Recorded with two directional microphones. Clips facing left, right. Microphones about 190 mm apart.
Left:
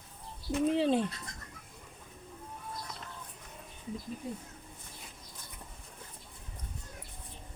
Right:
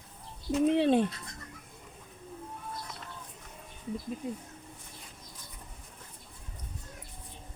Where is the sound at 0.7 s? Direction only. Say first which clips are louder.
Right 3 dB; 65° right (ahead or behind).